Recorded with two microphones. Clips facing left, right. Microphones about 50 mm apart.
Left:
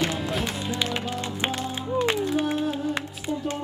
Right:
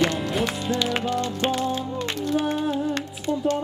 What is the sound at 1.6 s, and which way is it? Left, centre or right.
Music, centre.